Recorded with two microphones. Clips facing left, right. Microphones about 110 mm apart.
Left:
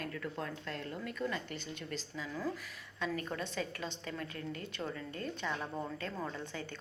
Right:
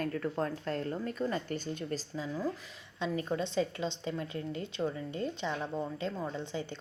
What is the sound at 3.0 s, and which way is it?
A woman's voice, 25° right (ahead or behind).